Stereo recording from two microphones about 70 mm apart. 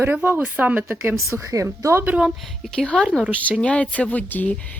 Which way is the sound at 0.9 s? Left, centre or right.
Right.